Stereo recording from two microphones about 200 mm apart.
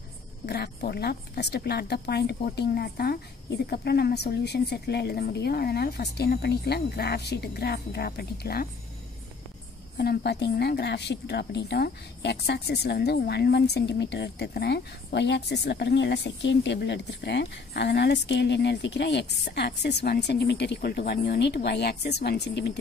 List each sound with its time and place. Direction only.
0.5 s a woman's voice: 55° left (ahead or behind)
9.9 s a woman's voice: 55° left (ahead or behind)